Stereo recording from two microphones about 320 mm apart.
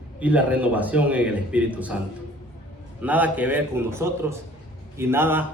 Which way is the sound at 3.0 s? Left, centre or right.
Centre.